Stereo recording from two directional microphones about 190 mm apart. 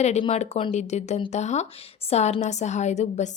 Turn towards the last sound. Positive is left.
turn(degrees=35)  # may be behind; listen again after turning